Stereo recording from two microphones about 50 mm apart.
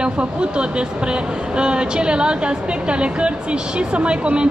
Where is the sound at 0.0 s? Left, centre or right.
Right.